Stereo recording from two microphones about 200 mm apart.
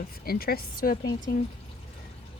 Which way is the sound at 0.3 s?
50° left (ahead or behind).